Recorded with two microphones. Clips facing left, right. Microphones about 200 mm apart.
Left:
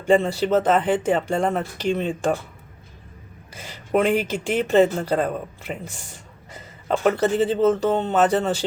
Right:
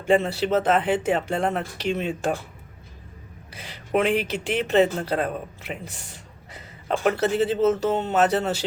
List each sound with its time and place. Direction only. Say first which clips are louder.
0.1 s speech: left 2 dB; centre (ahead or behind)
4.0 s speech: left 2 dB; 45° left (ahead or behind)
4.7 s speech: left 3 dB; centre (ahead or behind)